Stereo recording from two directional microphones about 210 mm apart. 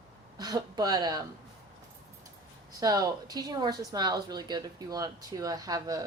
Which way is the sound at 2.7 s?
15° right (ahead or behind).